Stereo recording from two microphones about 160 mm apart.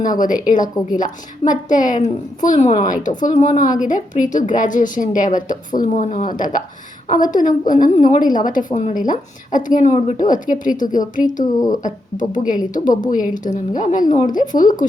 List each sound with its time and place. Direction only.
0.0 s a woman's voice: 55° left (ahead or behind)